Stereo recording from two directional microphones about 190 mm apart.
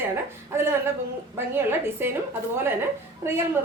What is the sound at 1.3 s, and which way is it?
Speech, 10° right (ahead or behind).